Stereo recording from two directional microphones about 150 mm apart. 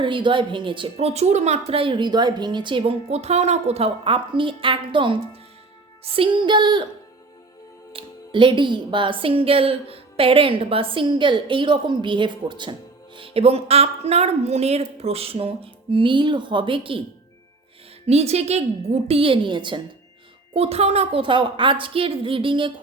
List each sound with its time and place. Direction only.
0.0 s a woman's voice: 35° right (ahead or behind)
7.9 s a woman's voice: 35° right (ahead or behind)
18.0 s a woman's voice: 45° right (ahead or behind)